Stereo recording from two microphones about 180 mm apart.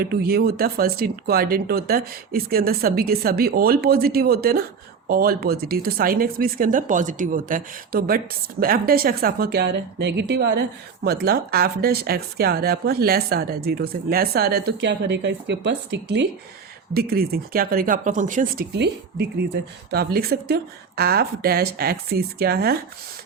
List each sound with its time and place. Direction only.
0.0 s speech: 60° right (ahead or behind)
16.9 s speech: 60° right (ahead or behind)
18.7 s speech: 65° right (ahead or behind)